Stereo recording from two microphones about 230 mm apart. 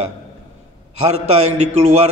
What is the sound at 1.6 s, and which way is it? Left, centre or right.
Speech, right.